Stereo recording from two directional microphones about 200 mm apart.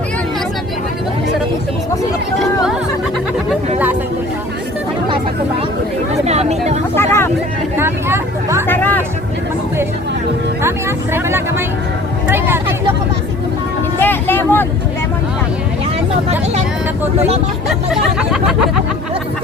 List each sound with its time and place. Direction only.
6.2 s vehicle: 35° right (ahead or behind)
6.9 s vehicle: 10° left (ahead or behind)
7.8 s vehicle: 10° right (ahead or behind)
8.6 s music: 10° left (ahead or behind)
10.6 s vehicle: 15° right (ahead or behind)
14.0 s vehicle: 10° left (ahead or behind)
17.9 s a sound: 5° right (ahead or behind)